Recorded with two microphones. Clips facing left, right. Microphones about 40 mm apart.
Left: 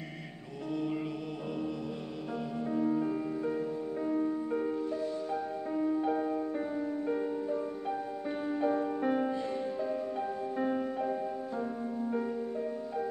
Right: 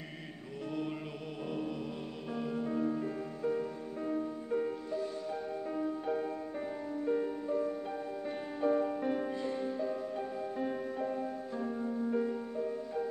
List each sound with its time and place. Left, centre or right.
2.5 s music: centre
9.0 s music: centre